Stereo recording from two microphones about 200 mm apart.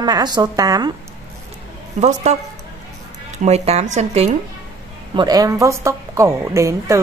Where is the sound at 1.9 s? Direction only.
35° right (ahead or behind).